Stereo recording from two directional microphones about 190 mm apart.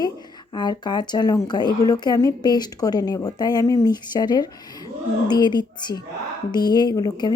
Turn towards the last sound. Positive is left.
turn(degrees=20)  # may be behind; listen again after turning